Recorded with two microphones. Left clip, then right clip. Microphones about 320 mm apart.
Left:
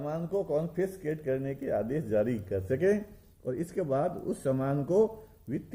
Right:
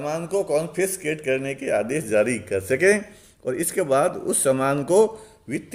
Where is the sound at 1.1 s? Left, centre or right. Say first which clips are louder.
Right 8 dB; centre.